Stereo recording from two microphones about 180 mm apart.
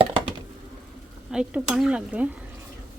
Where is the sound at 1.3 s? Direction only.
5° right (ahead or behind).